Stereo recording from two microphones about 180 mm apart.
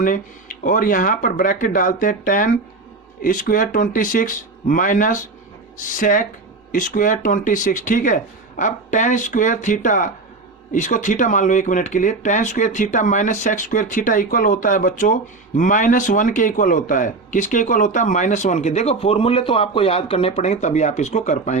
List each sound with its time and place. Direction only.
0.0 s speech: 50° left (ahead or behind)